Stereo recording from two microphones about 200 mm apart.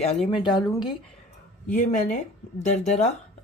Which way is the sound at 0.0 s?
30° left (ahead or behind).